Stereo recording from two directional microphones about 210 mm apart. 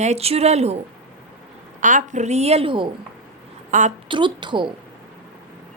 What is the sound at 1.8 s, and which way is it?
A woman's voice, 35° right (ahead or behind).